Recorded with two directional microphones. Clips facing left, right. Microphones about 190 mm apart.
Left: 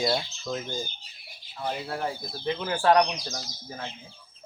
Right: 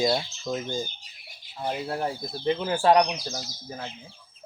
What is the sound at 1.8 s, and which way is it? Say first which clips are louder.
Speech: right 2 dB; 30° right (ahead or behind).